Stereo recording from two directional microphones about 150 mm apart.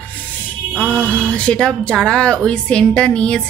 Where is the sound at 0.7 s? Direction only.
10° right (ahead or behind).